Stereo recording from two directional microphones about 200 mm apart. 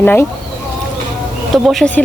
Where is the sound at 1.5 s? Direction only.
Centre (ahead or behind).